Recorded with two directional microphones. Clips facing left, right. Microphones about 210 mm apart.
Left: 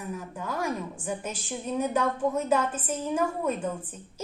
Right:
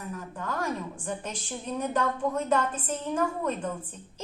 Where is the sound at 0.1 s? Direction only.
10° left (ahead or behind).